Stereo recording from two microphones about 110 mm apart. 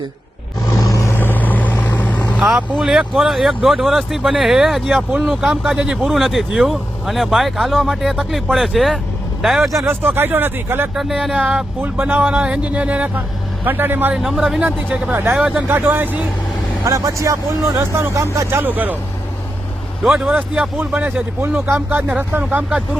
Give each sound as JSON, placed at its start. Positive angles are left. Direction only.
{"t": 0.8, "sound": "vehicle", "side_deg": 30}
{"t": 2.4, "sound": "speech", "side_deg": -10}
{"t": 9.7, "sound": "speech", "side_deg": -20}
{"t": 10.9, "sound": "speech", "side_deg": -5}
{"t": 14.2, "sound": "speech", "side_deg": 0}
{"t": 14.6, "sound": "speech", "side_deg": -15}
{"t": 16.8, "sound": "speech", "side_deg": -30}
{"t": 20.1, "sound": "speech", "side_deg": -10}